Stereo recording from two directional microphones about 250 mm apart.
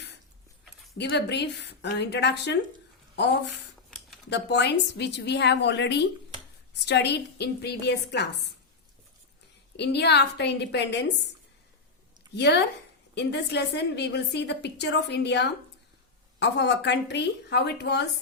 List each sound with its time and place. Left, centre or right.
0.9 s a woman's voice: left
4.3 s a woman's voice: left
9.7 s a woman's voice: left
12.3 s a woman's voice: left